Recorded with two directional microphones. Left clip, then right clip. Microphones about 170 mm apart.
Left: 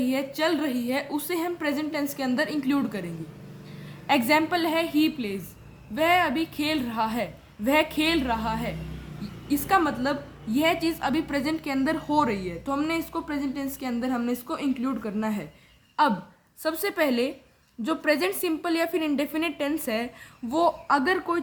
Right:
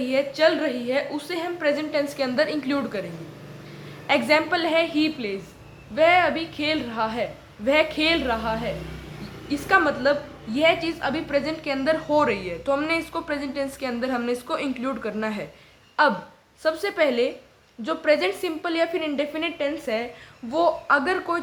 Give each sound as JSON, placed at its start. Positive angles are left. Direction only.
{"t": 0.0, "sound": "a woman's voice", "side_deg": 35}
{"t": 4.0, "sound": "a woman's voice", "side_deg": 35}